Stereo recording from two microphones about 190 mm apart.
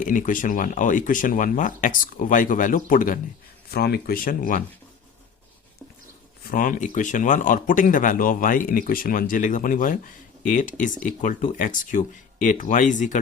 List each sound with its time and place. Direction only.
0.0 s speech: 45° left (ahead or behind)
3.7 s speech: 55° left (ahead or behind)
6.5 s speech: 45° left (ahead or behind)